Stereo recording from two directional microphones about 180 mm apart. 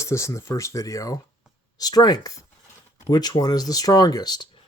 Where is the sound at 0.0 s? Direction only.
15° left (ahead or behind).